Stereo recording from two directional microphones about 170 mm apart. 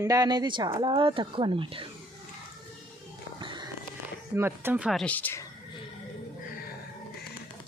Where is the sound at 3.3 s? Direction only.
25° right (ahead or behind).